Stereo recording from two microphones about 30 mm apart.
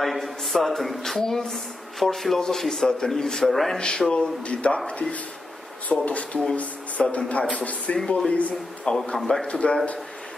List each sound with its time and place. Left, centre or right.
0.0 s speech: centre
2.3 s a man's voice: centre
3.7 s a man's voice: left
4.1 s speech: left
5.9 s speech: left
8.9 s a man's voice: left
9.2 s a man's voice: centre
9.5 s a man's voice: left